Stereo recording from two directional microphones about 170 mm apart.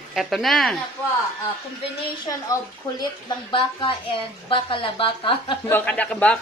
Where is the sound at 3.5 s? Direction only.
30° left (ahead or behind).